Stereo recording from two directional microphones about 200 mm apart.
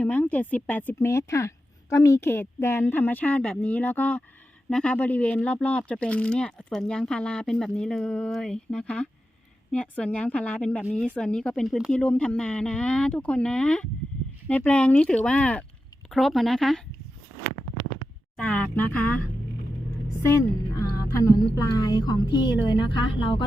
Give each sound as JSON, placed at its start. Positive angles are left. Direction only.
{"t": 0.0, "sound": "a woman's voice", "side_deg": 10}
{"t": 18.3, "sound": "a woman's voice", "side_deg": 5}
{"t": 20.7, "sound": "speech", "side_deg": 15}